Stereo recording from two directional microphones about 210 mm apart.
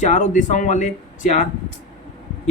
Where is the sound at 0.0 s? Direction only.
35° left (ahead or behind).